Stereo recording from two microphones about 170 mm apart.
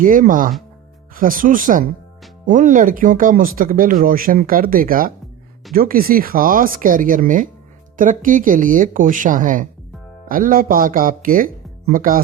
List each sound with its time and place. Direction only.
0.0 s speech: 50° right (ahead or behind)